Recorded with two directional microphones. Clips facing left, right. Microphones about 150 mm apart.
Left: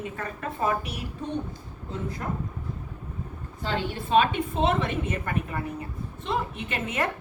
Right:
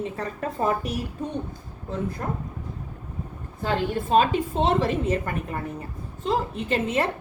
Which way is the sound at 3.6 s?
45° right (ahead or behind).